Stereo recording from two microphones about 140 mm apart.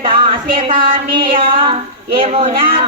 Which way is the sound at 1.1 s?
40° right (ahead or behind).